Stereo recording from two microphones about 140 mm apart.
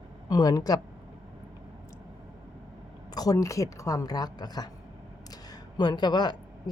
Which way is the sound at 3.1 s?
25° left (ahead or behind).